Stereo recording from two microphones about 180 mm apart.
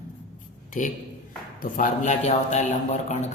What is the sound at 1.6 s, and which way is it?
A man's voice, 45° left (ahead or behind).